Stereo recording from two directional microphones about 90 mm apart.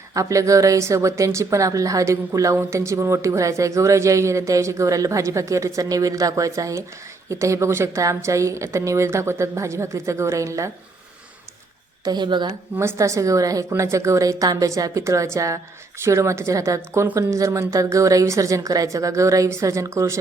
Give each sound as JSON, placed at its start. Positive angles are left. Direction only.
{"t": 0.1, "sound": "speech", "side_deg": -35}
{"t": 12.0, "sound": "a woman's voice", "side_deg": -55}
{"t": 12.8, "sound": "speech", "side_deg": -30}